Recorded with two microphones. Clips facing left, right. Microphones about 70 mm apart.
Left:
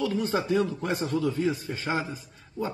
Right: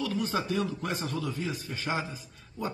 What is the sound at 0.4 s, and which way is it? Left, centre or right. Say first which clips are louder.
A man's voice: left 5 dB; left.